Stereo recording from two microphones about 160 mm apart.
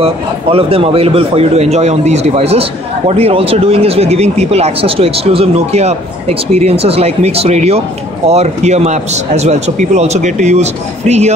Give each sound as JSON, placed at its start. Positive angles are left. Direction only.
{"t": 0.0, "sound": "a man's voice", "side_deg": -35}